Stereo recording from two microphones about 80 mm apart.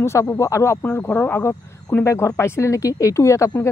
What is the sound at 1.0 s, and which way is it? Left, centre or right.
Speech, left.